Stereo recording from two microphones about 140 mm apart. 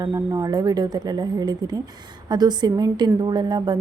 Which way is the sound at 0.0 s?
25° right (ahead or behind).